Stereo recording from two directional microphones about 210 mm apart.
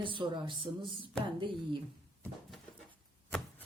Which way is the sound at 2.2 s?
5° left (ahead or behind).